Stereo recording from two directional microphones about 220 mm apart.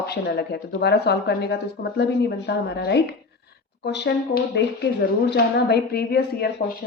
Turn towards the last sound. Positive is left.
turn(degrees=45)  # may be behind; listen again after turning